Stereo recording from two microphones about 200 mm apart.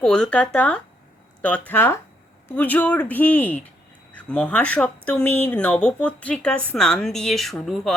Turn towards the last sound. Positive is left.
turn(degrees=0)  # may be behind; listen again after turning